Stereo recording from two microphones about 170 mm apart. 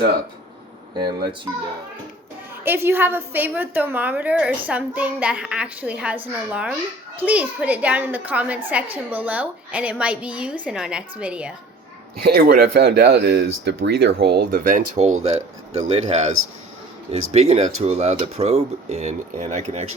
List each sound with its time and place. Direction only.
0.9 s speech: 25° right (ahead or behind)
2.6 s a woman's voice: 15° right (ahead or behind)
12.2 s speech: 65° right (ahead or behind); by 14.1 s 90° right
14.2 s speech: 70° right (ahead or behind); by 19.8 s 45° right (ahead or behind)